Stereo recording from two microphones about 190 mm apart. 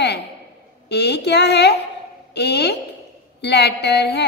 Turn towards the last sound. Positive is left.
turn(degrees=65)  # may be behind; listen again after turning